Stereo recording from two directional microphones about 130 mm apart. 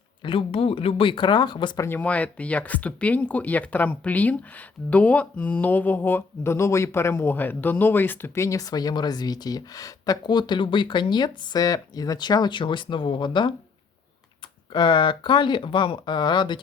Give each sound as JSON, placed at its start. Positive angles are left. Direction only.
{"t": 0.2, "sound": "speech", "side_deg": 45}
{"t": 1.8, "sound": "speech", "side_deg": 15}
{"t": 14.7, "sound": "speech", "side_deg": 35}